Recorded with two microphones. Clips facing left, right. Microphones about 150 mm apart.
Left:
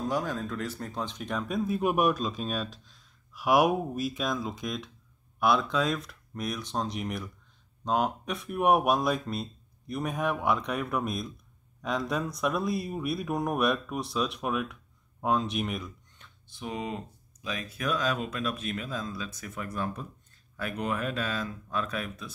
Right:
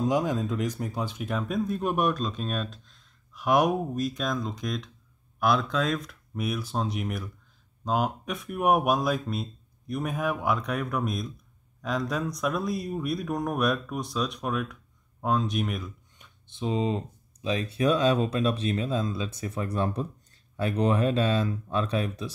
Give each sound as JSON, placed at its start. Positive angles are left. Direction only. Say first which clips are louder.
{"t": 0.0, "sound": "speech", "louder": "right 5 dB", "side_deg": -20}
{"t": 16.2, "sound": "speech", "louder": "right 9 dB", "side_deg": -20}